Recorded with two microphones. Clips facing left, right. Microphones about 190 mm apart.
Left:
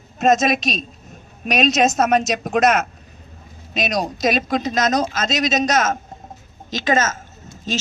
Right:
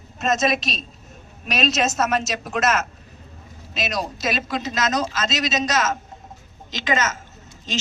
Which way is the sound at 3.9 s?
45° left (ahead or behind).